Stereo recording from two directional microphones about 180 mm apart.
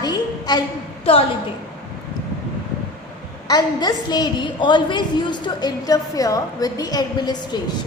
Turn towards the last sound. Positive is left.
turn(degrees=25)  # may be behind; listen again after turning